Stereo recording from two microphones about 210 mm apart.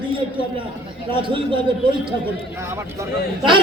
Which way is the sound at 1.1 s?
25° right (ahead or behind).